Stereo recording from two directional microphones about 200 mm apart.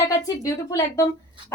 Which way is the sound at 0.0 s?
15° left (ahead or behind).